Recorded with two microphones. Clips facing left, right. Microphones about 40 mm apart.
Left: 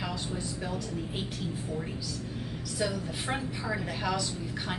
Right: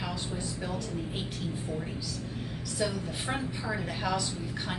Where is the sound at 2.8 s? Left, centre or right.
Centre.